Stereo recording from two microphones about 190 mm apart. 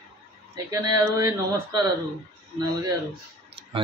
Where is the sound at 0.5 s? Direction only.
20° right (ahead or behind).